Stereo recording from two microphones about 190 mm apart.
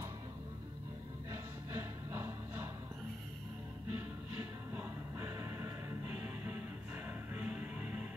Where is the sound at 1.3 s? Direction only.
15° right (ahead or behind).